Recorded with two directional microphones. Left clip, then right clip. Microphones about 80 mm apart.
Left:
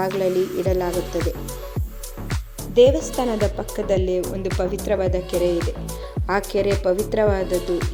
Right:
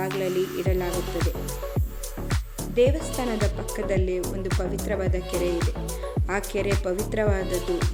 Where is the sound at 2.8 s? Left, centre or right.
Left.